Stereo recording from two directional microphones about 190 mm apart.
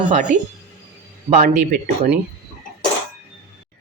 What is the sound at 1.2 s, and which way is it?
Speech, 45° right (ahead or behind).